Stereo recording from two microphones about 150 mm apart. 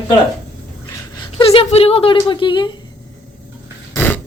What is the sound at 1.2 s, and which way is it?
Speech, 35° left (ahead or behind).